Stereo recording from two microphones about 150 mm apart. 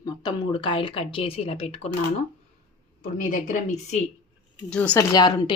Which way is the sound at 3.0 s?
60° left (ahead or behind).